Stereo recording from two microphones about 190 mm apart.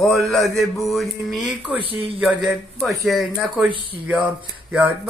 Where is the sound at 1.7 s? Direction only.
30° right (ahead or behind).